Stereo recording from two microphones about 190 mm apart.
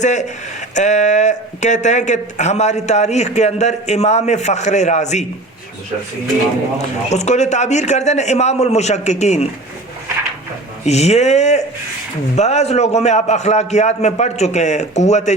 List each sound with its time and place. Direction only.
0.0 s speech: 40° left (ahead or behind)
7.1 s speech: 35° left (ahead or behind)
10.8 s speech: 35° left (ahead or behind)